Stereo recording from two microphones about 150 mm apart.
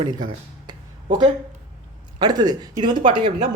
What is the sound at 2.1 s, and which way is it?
Speech, 25° right (ahead or behind).